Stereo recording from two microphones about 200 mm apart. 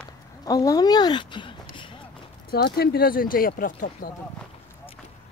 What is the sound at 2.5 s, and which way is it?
Speech, 50° left (ahead or behind).